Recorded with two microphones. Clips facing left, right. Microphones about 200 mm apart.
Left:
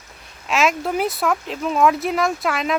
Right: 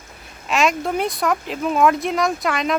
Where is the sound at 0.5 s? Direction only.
Centre (ahead or behind).